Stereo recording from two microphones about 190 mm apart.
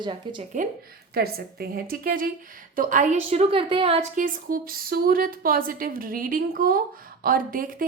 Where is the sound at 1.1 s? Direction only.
55° right (ahead or behind).